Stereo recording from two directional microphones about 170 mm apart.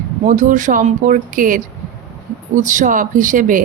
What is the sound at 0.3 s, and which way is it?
A woman's voice, 50° right (ahead or behind).